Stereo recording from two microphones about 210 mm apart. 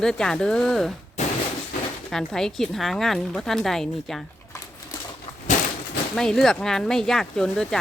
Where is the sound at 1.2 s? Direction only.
35° left (ahead or behind).